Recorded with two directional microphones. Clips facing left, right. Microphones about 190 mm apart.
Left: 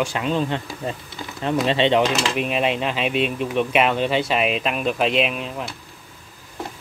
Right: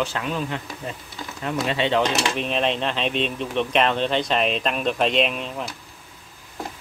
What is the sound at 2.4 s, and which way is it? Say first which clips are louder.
Speech: left 2 dB; 10° left (ahead or behind).